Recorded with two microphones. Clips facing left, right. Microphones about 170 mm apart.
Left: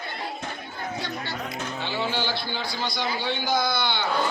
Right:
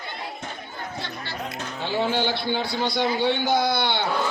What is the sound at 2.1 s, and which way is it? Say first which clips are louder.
A man's voice: right 5 dB; 55° right (ahead or behind).